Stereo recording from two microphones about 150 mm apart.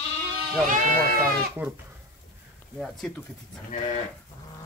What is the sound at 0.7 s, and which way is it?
Speech, 70° right (ahead or behind).